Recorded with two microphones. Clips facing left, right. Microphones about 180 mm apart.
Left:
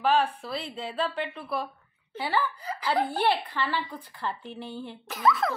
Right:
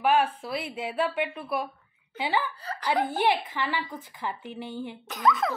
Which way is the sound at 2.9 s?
20° right (ahead or behind).